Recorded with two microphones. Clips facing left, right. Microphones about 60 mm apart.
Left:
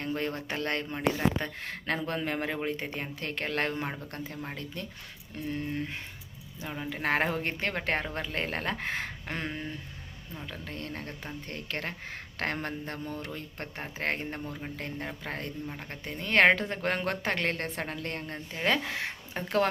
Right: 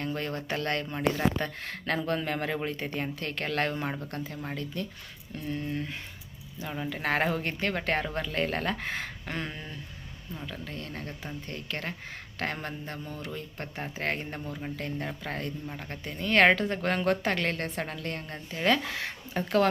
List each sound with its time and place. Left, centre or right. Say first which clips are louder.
0.2 s speech: even; left
6.9 s a woman's voice: even; left
14.3 s speech: right 1 dB; centre
14.8 s a woman's voice: right 2 dB; left